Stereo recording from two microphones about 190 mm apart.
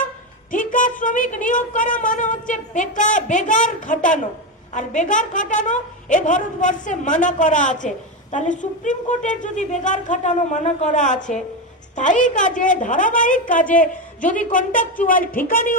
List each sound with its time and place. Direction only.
0.5 s a woman's voice: 45° left (ahead or behind)